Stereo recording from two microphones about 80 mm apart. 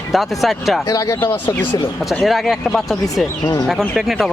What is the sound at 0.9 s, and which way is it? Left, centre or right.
Speech, left.